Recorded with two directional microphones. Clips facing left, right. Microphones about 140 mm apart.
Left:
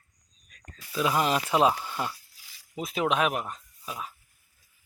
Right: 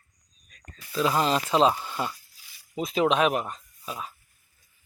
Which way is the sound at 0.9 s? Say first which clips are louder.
Right 2 dB; 10° left (ahead or behind).